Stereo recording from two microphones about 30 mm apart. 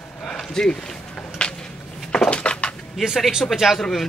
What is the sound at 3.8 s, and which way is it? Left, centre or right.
Speech, centre.